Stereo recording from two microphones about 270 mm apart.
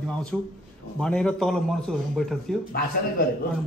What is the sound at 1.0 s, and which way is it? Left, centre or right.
Speech, centre.